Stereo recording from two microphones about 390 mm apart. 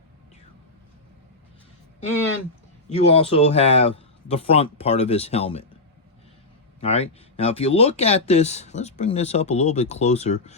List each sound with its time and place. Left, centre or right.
2.9 s speech: centre
6.8 s speech: centre